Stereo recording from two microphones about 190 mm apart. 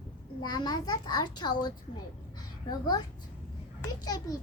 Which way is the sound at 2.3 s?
20° left (ahead or behind).